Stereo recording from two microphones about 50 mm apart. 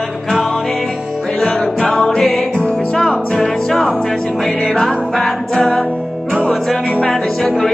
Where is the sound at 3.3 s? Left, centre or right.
Centre.